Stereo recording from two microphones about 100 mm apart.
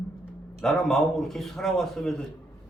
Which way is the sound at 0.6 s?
5° left (ahead or behind).